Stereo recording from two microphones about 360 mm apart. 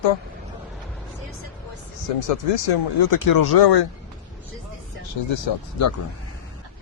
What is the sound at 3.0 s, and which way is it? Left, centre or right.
Speech, left.